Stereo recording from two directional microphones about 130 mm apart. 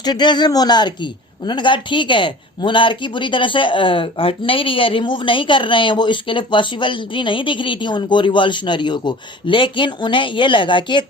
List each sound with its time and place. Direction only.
0.0 s speech: 35° left (ahead or behind)